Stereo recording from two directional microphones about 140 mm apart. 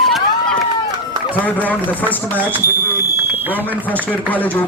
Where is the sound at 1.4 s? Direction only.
10° left (ahead or behind).